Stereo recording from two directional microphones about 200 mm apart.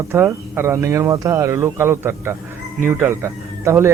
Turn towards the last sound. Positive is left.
turn(degrees=-15)  # may be behind; listen again after turning